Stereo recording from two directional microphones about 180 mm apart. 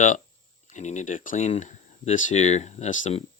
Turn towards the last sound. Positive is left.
turn(degrees=40)  # may be behind; listen again after turning